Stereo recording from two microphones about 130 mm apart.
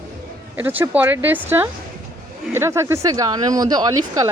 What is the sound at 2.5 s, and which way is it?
Speech, 20° right (ahead or behind).